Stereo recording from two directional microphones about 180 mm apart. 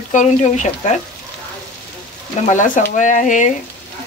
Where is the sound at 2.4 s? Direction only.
45° left (ahead or behind).